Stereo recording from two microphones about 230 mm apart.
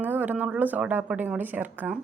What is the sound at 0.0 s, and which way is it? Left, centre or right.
Speech, centre.